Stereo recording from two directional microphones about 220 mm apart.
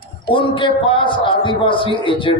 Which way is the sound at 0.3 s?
25° left (ahead or behind).